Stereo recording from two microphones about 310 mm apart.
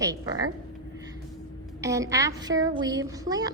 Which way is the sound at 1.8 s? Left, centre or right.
Centre.